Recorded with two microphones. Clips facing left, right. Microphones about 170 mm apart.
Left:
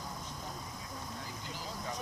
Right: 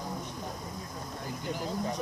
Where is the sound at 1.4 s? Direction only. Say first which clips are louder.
Right 10 dB; 55° right (ahead or behind).